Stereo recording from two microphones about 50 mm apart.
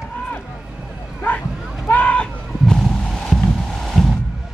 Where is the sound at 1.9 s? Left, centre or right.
Left.